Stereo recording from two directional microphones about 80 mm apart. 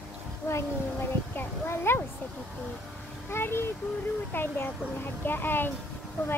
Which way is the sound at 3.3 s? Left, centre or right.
Left.